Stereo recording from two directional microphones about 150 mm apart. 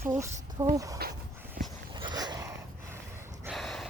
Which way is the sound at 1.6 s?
65° right (ahead or behind).